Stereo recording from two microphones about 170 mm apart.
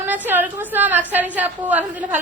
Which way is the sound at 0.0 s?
10° right (ahead or behind).